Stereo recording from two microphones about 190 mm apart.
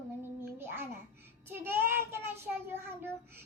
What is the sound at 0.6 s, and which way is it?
Babbling, 10° right (ahead or behind).